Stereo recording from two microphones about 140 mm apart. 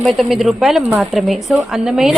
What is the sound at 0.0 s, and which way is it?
A woman's voice, centre (ahead or behind).